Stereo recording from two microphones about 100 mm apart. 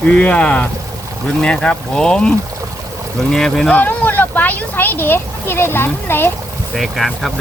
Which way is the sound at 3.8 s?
15° left (ahead or behind).